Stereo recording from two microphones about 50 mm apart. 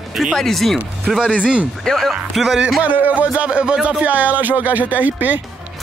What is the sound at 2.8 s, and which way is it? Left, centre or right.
Speech, right.